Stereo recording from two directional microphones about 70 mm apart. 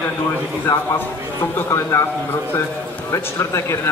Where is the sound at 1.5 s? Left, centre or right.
Left.